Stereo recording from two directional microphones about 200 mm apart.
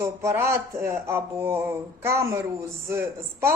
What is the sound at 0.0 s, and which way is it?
Speech, 15° right (ahead or behind).